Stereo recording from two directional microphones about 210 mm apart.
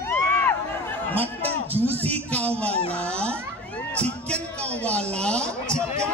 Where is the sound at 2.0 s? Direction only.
5° left (ahead or behind).